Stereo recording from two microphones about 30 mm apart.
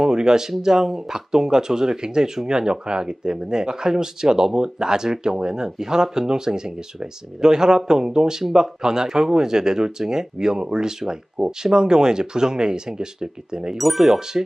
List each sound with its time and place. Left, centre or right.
0.0 s speech: right
13.7 s speech: centre
14.2 s speech: centre